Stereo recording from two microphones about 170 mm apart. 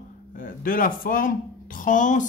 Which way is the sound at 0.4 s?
55° left (ahead or behind).